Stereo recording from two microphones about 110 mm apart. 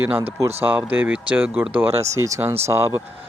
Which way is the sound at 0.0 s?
20° right (ahead or behind).